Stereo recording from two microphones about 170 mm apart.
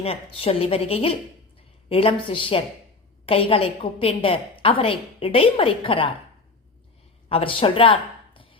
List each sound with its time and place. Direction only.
0.0 s a woman's voice: 35° left (ahead or behind)
7.3 s a woman's voice: 35° left (ahead or behind)